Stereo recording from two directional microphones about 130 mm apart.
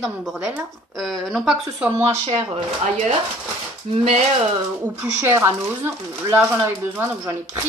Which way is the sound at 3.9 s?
50° right (ahead or behind).